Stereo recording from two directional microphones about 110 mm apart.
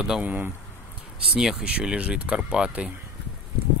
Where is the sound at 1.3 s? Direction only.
5° right (ahead or behind).